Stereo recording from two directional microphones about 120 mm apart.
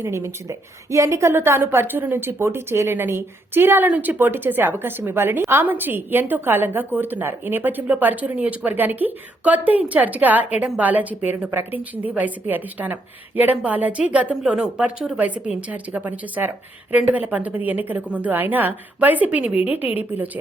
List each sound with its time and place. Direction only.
0.0 s a woman's voice: 20° right (ahead or behind)